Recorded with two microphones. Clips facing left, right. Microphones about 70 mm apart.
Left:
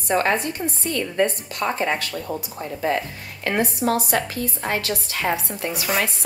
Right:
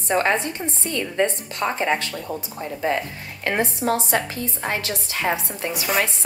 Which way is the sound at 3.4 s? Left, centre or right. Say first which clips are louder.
Left 1 dB; right.